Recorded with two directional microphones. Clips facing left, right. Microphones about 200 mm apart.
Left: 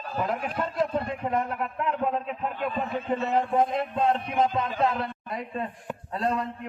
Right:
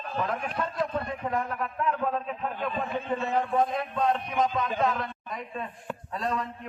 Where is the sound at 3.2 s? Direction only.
25° left (ahead or behind).